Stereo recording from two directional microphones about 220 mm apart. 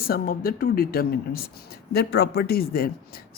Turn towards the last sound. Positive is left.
turn(degrees=45)  # may be behind; listen again after turning